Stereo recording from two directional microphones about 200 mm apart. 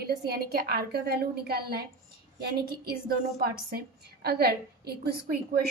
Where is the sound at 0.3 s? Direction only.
50° right (ahead or behind).